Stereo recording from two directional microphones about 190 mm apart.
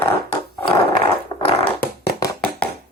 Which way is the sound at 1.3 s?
30° left (ahead or behind).